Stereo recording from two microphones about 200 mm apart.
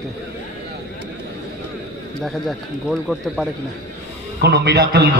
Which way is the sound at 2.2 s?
Centre (ahead or behind).